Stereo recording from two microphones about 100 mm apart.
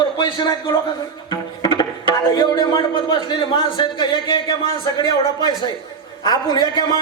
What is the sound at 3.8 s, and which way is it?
Speech, 50° left (ahead or behind).